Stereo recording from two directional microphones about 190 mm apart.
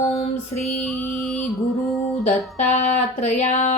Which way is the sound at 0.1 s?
35° left (ahead or behind).